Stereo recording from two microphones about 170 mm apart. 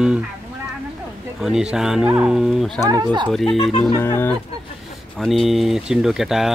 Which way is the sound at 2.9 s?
25° right (ahead or behind).